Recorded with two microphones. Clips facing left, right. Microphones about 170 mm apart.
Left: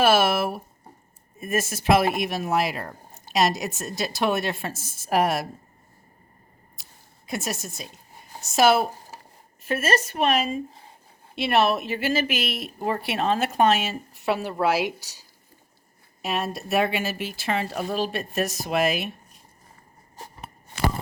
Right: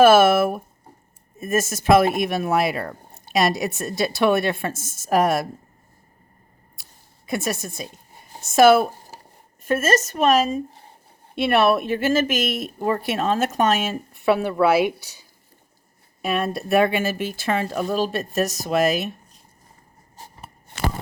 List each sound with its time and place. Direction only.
0.0 s a woman's voice: 50° right (ahead or behind)
7.3 s speech: 55° right (ahead or behind); by 10.6 s 40° right (ahead or behind)
11.3 s speech: 55° right (ahead or behind)
16.2 s speech: 55° right (ahead or behind)